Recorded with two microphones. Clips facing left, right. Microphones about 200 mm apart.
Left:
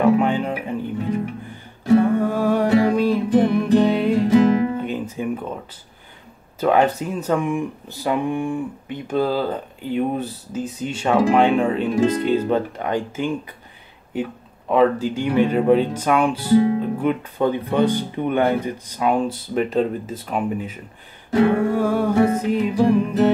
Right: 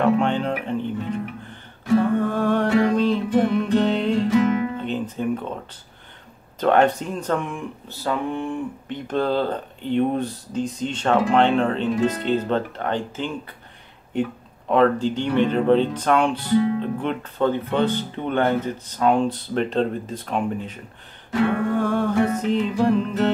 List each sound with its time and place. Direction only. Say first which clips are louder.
0.0 s music: left 2 dB; 10° left (ahead or behind)
2.1 s mantra: left 2 dB; 10° left (ahead or behind)
3.5 s music: left 3 dB; 10° left (ahead or behind)
4.3 s music: left 6 dB; 35° left (ahead or behind)
4.8 s guitar: even; 10° left (ahead or behind)
6.6 s speech: even; 5° left (ahead or behind)